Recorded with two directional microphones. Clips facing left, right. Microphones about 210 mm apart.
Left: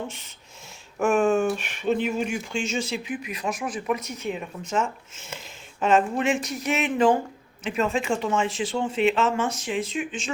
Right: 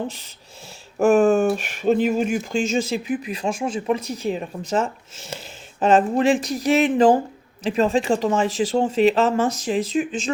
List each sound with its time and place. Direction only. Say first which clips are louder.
0.9 s speech: right 5 dB; 35° right (ahead or behind)